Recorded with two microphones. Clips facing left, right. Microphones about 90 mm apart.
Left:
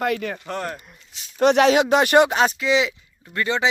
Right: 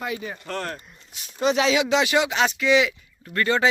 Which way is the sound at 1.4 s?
60° left (ahead or behind).